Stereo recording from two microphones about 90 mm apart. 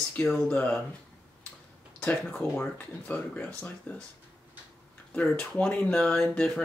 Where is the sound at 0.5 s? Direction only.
15° left (ahead or behind).